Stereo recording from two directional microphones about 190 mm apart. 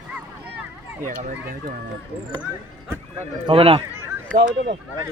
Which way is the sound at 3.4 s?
30° right (ahead or behind).